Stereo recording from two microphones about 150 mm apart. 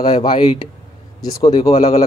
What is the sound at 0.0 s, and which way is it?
A man's voice, 30° left (ahead or behind).